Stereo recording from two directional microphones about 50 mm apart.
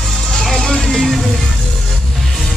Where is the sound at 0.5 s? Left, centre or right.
Centre.